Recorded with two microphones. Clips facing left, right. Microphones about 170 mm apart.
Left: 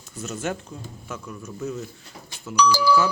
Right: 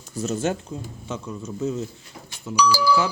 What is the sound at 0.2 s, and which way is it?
Speech, 30° right (ahead or behind).